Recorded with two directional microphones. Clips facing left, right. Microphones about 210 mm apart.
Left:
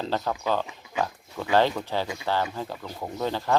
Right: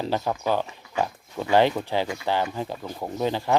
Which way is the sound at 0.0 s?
15° right (ahead or behind).